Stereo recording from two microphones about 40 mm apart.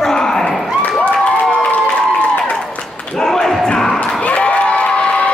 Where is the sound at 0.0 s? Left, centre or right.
Centre.